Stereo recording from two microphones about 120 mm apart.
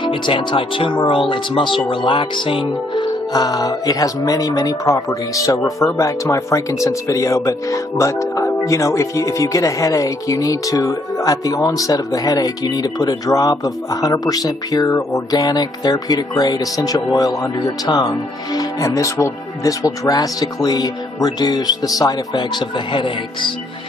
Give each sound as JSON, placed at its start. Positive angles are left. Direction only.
{"t": 0.0, "sound": "speech", "side_deg": 45}